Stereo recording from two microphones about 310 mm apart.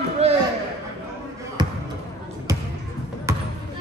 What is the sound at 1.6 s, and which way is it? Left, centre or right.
Basketball bounce, centre.